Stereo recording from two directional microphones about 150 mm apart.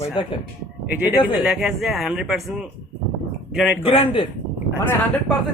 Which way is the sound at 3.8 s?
35° left (ahead or behind).